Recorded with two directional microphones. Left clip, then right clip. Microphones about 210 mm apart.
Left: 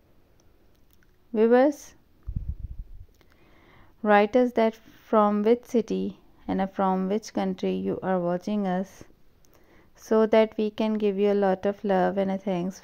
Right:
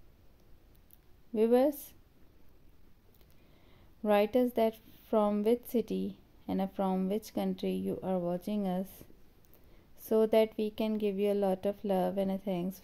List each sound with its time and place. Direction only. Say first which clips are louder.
1.3 s speech: left 7 dB; 15° left (ahead or behind)
3.6 s speech: left 8 dB; 15° left (ahead or behind)